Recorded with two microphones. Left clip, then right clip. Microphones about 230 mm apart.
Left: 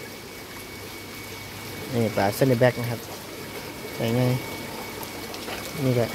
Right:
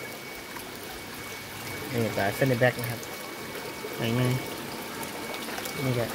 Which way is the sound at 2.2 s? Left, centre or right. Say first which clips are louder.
Left 4 dB; centre.